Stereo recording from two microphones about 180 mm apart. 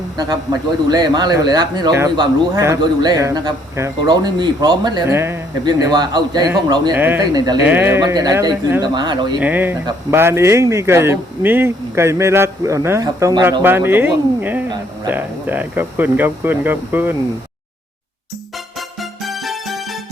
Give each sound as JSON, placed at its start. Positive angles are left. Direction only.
{"t": 0.9, "sound": "speech", "side_deg": -20}
{"t": 6.9, "sound": "speech", "side_deg": -10}
{"t": 7.2, "sound": "speech", "side_deg": -20}
{"t": 9.4, "sound": "speech", "side_deg": -10}
{"t": 19.2, "sound": "music", "side_deg": 0}